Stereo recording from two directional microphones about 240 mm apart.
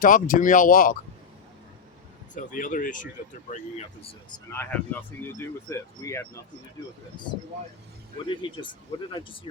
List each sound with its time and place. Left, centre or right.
0.0 s speech: left
2.3 s speech: left
4.5 s speech: centre